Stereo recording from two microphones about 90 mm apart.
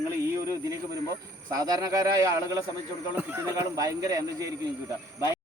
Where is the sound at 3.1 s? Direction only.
30° right (ahead or behind).